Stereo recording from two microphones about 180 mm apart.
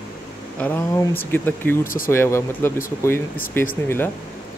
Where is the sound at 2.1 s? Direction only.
15° left (ahead or behind).